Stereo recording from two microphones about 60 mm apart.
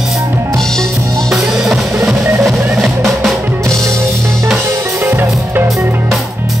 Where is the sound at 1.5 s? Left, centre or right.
Centre.